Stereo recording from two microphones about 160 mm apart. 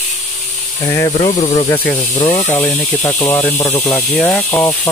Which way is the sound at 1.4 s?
40° left (ahead or behind).